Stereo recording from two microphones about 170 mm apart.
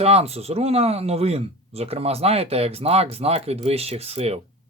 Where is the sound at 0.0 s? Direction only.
35° right (ahead or behind).